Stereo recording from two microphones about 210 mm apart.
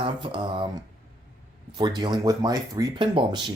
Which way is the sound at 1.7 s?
20° right (ahead or behind).